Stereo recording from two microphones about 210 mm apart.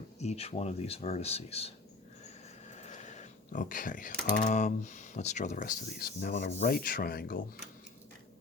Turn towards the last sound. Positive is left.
turn(degrees=45)  # may be behind; listen again after turning